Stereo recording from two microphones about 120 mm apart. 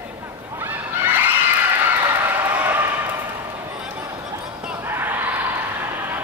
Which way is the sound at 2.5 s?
15° right (ahead or behind).